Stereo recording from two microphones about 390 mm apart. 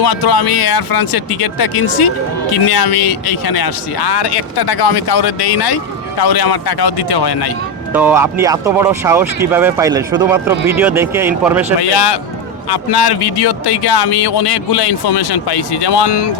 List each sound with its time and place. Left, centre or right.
0.0 s speech: left
7.9 s speech: centre
11.8 s speech: left
12.7 s speech: left